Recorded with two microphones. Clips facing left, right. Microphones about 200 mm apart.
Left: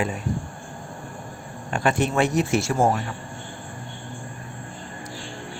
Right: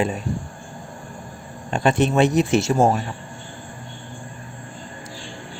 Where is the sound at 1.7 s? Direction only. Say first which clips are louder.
Right 4 dB; 25° right (ahead or behind).